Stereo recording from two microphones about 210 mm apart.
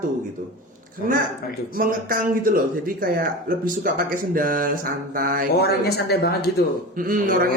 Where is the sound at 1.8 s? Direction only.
40° right (ahead or behind).